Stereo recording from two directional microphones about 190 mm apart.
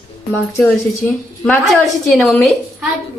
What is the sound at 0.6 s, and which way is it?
Speech, 10° left (ahead or behind).